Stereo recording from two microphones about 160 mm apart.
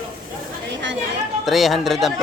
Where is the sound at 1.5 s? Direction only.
Centre (ahead or behind).